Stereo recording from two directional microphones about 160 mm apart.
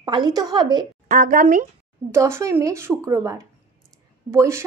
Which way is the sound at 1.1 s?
55° right (ahead or behind).